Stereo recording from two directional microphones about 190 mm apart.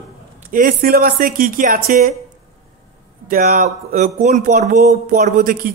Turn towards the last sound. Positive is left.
turn(degrees=-50)  # may be behind; listen again after turning